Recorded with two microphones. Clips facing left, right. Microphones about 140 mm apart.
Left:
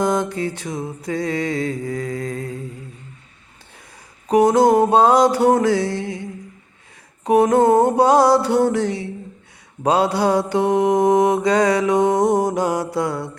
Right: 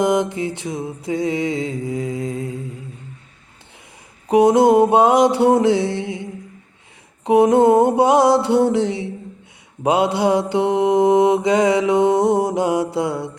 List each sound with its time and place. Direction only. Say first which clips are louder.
0.0 s mantra: right 2 dB; 20° right (ahead or behind)
4.3 s mantra: right 1 dB; 25° right (ahead or behind)
7.3 s mantra: right 1 dB; 25° right (ahead or behind)